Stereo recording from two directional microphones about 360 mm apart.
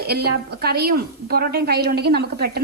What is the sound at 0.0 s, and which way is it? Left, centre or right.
Speech, right.